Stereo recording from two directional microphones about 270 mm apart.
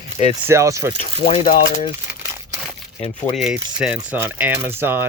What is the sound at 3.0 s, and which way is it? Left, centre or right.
Speech, left.